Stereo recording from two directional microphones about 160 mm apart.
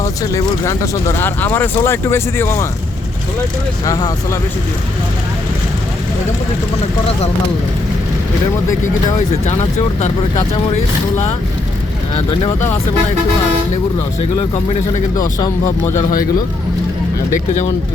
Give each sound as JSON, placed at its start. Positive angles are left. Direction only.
{"t": 0.0, "sound": "speech", "side_deg": 20}
{"t": 3.8, "sound": "speech", "side_deg": 20}
{"t": 9.3, "sound": "speech", "side_deg": 45}
{"t": 15.1, "sound": "speech", "side_deg": 20}
{"t": 15.9, "sound": "speech", "side_deg": 50}